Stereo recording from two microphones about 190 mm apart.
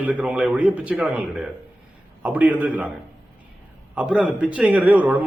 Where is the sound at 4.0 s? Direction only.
5° right (ahead or behind).